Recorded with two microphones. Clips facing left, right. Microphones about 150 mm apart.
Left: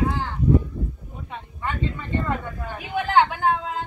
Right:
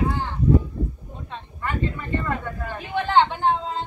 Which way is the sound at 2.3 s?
10° left (ahead or behind).